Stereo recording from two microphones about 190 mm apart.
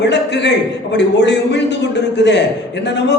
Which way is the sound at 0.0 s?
65° left (ahead or behind).